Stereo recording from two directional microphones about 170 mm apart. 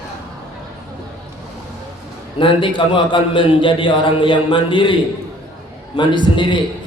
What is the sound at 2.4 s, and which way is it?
A man's voice, 30° left (ahead or behind).